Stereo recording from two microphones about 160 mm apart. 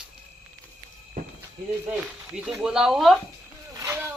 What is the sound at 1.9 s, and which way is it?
Speech, 5° right (ahead or behind).